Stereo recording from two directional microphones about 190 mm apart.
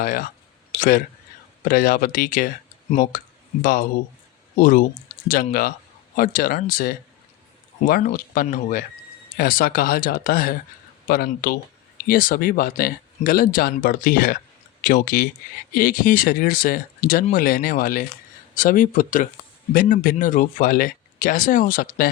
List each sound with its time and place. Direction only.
0.0 s speech: 50° left (ahead or behind)
8.0 s speech: 45° left (ahead or behind)